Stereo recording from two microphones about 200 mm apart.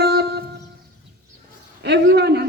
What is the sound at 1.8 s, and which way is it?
Speech, 55° right (ahead or behind).